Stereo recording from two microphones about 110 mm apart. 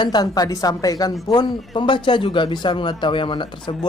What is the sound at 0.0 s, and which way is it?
A woman's voice, 40° left (ahead or behind).